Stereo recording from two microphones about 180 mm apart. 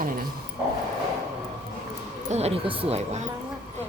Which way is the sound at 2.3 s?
35° right (ahead or behind).